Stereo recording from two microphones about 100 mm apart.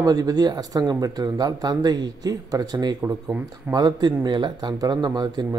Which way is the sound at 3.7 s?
40° right (ahead or behind).